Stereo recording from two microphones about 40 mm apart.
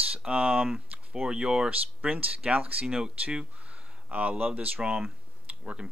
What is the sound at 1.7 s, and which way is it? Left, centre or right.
Speech, right.